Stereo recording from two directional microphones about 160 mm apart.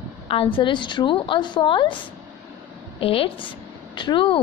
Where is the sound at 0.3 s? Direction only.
35° left (ahead or behind).